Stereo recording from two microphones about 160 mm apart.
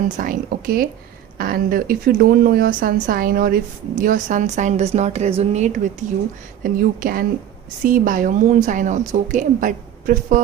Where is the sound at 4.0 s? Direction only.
55° right (ahead or behind).